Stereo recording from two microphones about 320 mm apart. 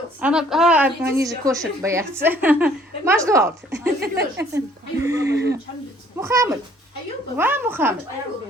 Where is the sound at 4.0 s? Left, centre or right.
Right.